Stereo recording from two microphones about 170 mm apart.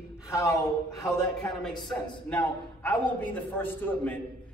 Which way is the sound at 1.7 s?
25° left (ahead or behind).